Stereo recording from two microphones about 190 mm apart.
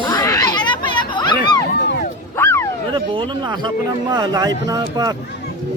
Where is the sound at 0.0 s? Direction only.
20° left (ahead or behind).